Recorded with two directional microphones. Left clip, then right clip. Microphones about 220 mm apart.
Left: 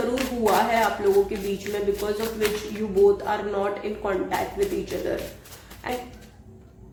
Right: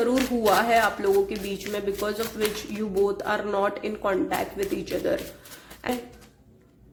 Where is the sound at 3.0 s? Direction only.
50° right (ahead or behind).